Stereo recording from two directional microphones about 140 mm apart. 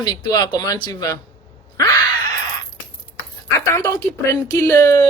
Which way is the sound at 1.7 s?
20° left (ahead or behind).